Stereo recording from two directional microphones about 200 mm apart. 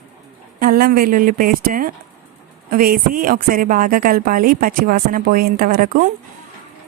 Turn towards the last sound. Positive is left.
turn(degrees=-45)  # may be behind; listen again after turning